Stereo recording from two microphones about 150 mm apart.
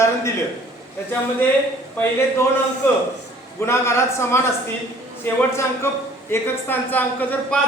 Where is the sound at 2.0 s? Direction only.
20° left (ahead or behind).